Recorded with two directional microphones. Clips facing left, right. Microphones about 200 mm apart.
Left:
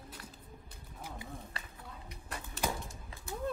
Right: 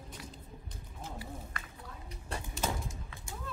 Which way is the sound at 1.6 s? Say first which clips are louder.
Right 1 dB; 35° left (ahead or behind).